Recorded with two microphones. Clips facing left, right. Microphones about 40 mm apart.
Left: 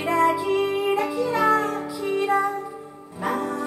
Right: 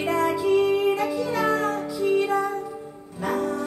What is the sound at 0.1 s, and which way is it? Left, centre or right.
Music, centre.